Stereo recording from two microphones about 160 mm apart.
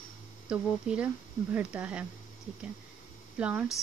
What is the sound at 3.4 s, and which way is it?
Speech, 10° right (ahead or behind).